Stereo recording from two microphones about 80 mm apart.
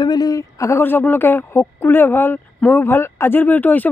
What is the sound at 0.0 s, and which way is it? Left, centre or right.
Speech, left.